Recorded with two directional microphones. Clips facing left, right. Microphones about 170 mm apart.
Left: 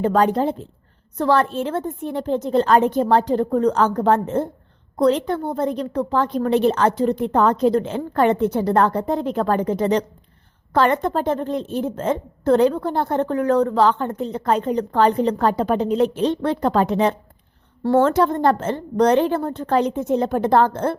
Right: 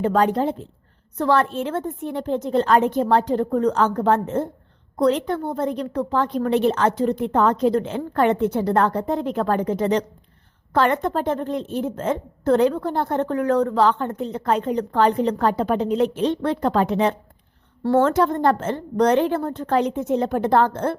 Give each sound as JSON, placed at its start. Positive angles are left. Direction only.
{"t": 0.0, "sound": "a woman's voice", "side_deg": 40}